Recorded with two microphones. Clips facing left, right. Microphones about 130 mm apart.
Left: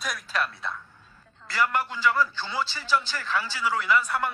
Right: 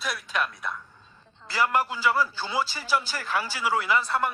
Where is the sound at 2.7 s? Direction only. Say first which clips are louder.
Left 1 dB; 40° right (ahead or behind).